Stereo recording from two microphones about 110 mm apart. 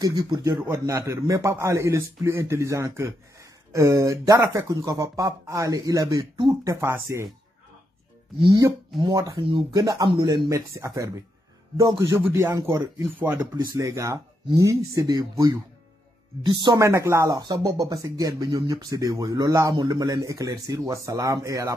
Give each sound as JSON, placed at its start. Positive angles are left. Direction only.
{"t": 0.0, "sound": "speech", "side_deg": -35}
{"t": 6.1, "sound": "speech", "side_deg": -45}
{"t": 6.6, "sound": "speech", "side_deg": -25}
{"t": 8.4, "sound": "speech", "side_deg": -45}
{"t": 9.0, "sound": "speech", "side_deg": -30}
{"t": 16.7, "sound": "speech", "side_deg": -25}